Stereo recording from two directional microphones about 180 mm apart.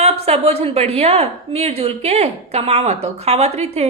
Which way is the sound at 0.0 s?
35° right (ahead or behind).